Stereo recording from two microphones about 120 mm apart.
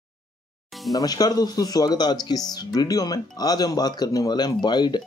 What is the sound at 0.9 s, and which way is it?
Speech, 30° left (ahead or behind).